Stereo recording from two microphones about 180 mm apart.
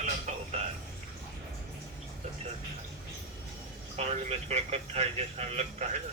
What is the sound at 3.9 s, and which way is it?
Speech, 40° right (ahead or behind).